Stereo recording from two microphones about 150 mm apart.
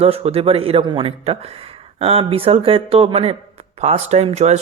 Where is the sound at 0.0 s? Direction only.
40° right (ahead or behind).